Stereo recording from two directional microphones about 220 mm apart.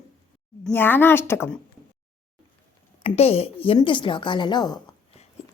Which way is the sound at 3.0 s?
30° left (ahead or behind).